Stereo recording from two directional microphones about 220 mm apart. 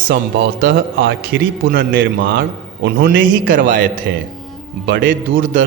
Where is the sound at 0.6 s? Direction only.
55° right (ahead or behind).